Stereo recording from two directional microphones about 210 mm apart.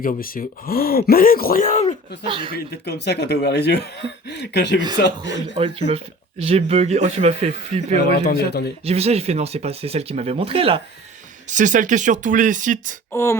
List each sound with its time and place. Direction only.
0.0 s speech: 45° left (ahead or behind)
2.2 s speech: 25° right (ahead or behind)
2.5 s speech: 50° left (ahead or behind)
5.5 s speech: 25° right (ahead or behind)
8.3 s speech: 50° left (ahead or behind)
8.8 s speech: 30° right (ahead or behind)
11.4 s speech: 35° right (ahead or behind)
13.1 s a sound: 10° left (ahead or behind)